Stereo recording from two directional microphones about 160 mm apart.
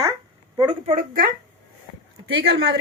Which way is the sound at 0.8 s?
55° right (ahead or behind).